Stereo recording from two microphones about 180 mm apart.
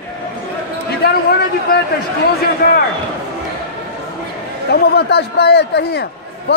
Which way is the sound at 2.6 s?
65° left (ahead or behind).